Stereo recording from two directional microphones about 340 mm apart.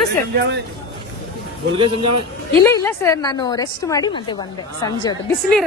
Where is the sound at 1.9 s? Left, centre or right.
Right.